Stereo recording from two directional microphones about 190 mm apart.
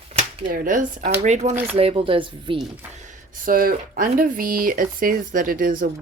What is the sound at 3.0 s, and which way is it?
Speech, 45° right (ahead or behind).